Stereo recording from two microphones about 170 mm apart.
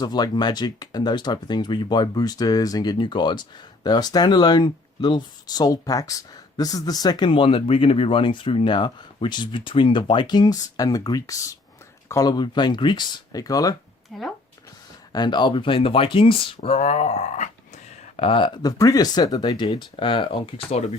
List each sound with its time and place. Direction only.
0.0 s speech: 25° left (ahead or behind)
14.1 s speech: centre (ahead or behind)
15.1 s speech: 25° left (ahead or behind)